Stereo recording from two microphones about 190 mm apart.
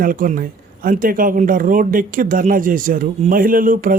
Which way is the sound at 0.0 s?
45° right (ahead or behind).